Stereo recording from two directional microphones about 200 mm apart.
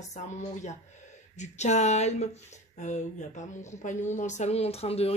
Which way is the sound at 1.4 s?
35° left (ahead or behind).